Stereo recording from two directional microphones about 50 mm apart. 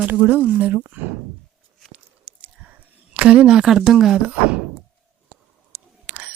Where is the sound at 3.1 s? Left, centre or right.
Right.